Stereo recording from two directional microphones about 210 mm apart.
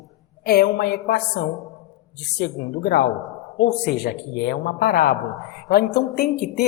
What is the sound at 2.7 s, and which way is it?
Speech, 50° left (ahead or behind).